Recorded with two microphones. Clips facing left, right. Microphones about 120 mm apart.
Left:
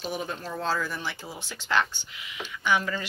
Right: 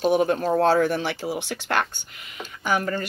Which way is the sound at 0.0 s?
65° right (ahead or behind).